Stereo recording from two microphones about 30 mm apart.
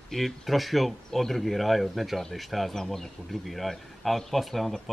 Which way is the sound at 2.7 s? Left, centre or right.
Centre.